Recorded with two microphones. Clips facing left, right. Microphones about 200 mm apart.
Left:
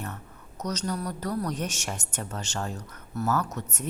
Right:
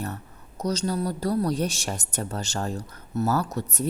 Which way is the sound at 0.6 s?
30° right (ahead or behind).